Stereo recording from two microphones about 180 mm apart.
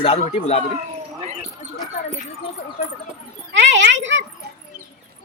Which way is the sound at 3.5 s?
85° right.